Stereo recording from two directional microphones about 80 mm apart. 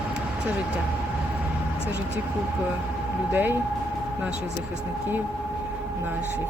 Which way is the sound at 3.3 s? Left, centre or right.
Right.